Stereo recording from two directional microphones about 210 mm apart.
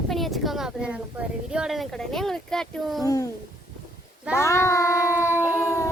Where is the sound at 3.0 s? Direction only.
15° left (ahead or behind).